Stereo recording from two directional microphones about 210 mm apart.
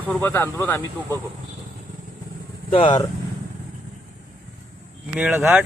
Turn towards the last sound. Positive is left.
turn(degrees=-10)  # may be behind; listen again after turning